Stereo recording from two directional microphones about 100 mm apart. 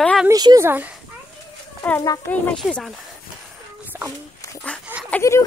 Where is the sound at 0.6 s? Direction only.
20° right (ahead or behind).